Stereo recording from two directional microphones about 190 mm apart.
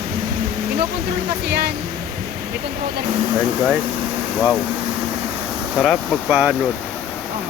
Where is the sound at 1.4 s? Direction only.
60° right (ahead or behind).